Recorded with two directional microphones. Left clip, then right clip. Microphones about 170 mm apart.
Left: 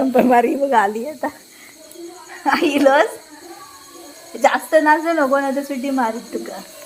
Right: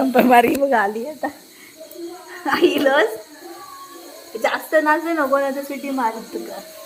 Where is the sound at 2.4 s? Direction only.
65° left (ahead or behind).